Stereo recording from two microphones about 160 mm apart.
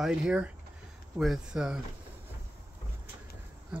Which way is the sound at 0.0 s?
5° right (ahead or behind).